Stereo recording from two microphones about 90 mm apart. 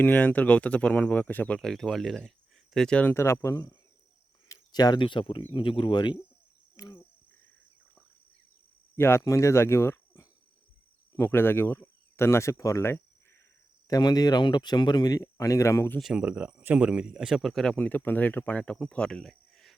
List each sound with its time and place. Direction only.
0.0 s speech: 20° left (ahead or behind)
1.5 s speech: 5° left (ahead or behind)
3.1 s speech: 30° left (ahead or behind)
4.5 s speech: 50° left (ahead or behind); by 5.5 s 75° left (ahead or behind)
5.5 s speech: 65° left (ahead or behind)
6.8 s speech: 35° left (ahead or behind)
9.0 s speech: 25° left (ahead or behind)
13.8 s speech: 45° left (ahead or behind)
16.0 s speech: 5° right (ahead or behind)
16.2 s speech: 15° right (ahead or behind); by 17.7 s 5° left (ahead or behind)
17.7 s speech: 20° left (ahead or behind); by 19.7 s 5° left (ahead or behind)